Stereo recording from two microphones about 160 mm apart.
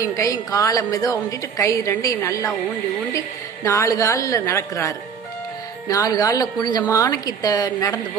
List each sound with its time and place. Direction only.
0.1 s a woman's voice: 20° left (ahead or behind)